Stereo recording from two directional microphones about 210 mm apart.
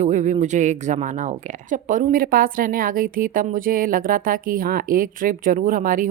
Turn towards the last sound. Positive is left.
turn(degrees=-40)  # may be behind; listen again after turning